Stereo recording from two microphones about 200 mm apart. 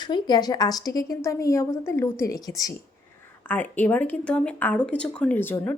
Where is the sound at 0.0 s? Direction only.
20° left (ahead or behind).